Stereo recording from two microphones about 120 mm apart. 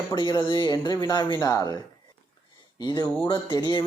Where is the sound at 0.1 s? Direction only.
35° left (ahead or behind).